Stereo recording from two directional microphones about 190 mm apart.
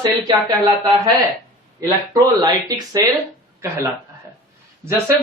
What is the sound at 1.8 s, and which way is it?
Speech, 20° right (ahead or behind).